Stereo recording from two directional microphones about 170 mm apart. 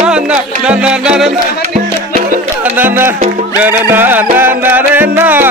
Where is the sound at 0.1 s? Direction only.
5° right (ahead or behind).